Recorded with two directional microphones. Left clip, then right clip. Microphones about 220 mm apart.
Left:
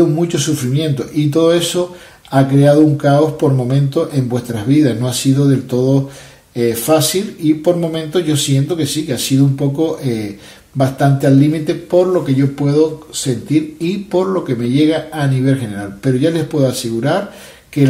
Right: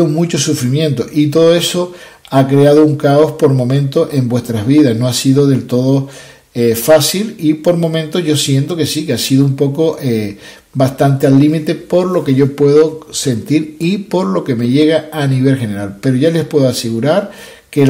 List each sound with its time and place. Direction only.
0.0 s speech: 40° right (ahead or behind)